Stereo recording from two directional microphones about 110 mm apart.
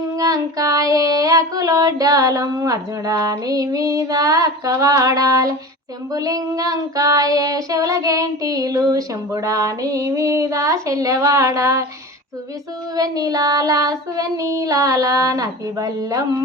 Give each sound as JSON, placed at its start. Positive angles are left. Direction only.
{"t": 0.2, "sound": "child singing", "side_deg": -35}
{"t": 13.0, "sound": "child singing", "side_deg": -35}